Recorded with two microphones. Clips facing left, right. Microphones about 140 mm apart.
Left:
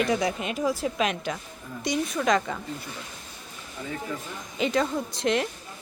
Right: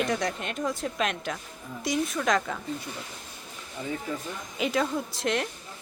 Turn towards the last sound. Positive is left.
turn(degrees=0)  # may be behind; listen again after turning